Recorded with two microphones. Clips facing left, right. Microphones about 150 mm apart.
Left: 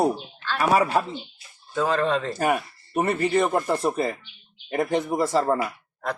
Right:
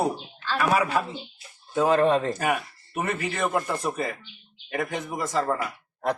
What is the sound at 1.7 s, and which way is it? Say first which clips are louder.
Speech: right 3 dB; 15° right (ahead or behind).